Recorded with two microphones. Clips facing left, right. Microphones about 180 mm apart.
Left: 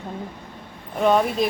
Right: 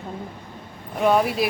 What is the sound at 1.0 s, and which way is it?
Speech, 5° right (ahead or behind).